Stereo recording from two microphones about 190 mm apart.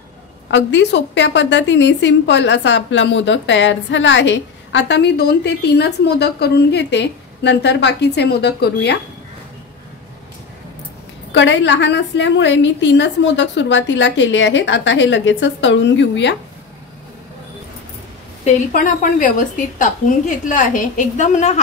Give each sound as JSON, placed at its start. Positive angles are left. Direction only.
{"t": 0.5, "sound": "a woman's voice", "side_deg": 70}
{"t": 11.3, "sound": "a woman's voice", "side_deg": 70}
{"t": 18.4, "sound": "a woman's voice", "side_deg": 45}